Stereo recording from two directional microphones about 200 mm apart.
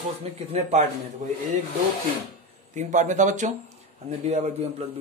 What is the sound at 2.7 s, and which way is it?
A man's voice, 40° right (ahead or behind).